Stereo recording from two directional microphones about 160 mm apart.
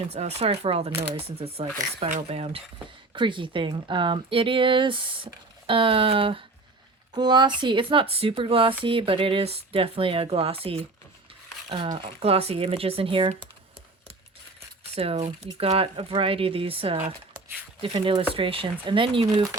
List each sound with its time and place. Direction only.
0.1 s speech: 40° right (ahead or behind)
14.9 s speech: 40° right (ahead or behind)